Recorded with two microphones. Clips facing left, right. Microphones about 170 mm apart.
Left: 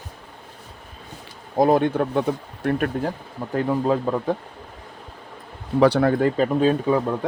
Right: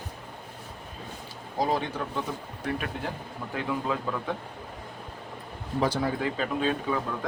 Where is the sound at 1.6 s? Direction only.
55° left (ahead or behind).